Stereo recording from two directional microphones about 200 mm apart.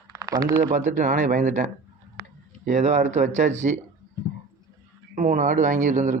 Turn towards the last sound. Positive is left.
turn(degrees=-40)  # may be behind; listen again after turning